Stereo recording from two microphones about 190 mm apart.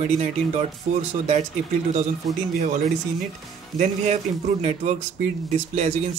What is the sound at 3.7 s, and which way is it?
Speech, 35° right (ahead or behind).